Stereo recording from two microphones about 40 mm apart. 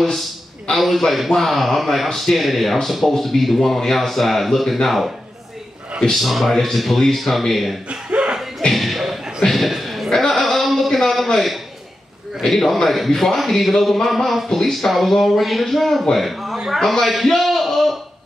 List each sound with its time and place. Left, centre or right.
0.7 s a man's voice: centre
6.1 s a man's voice: centre
8.1 s chuckle: right
8.7 s a sound: centre
12.4 s a man's voice: centre
16.7 s a sound: centre